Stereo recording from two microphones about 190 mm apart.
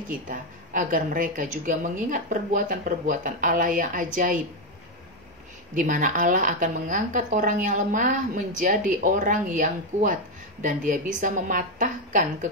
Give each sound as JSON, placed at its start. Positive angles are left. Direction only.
{"t": 0.3, "sound": "a woman's voice", "side_deg": -45}
{"t": 5.8, "sound": "a woman's voice", "side_deg": -45}